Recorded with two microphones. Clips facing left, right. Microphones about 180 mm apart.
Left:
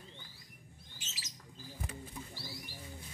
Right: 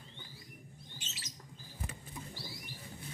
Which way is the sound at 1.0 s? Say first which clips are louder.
Left 1 dB; 55° right (ahead or behind).